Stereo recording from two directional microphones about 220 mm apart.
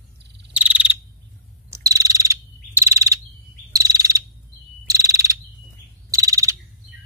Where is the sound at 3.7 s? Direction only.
15° right (ahead or behind).